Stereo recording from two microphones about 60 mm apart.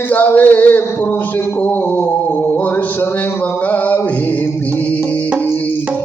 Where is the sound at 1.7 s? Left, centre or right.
Left.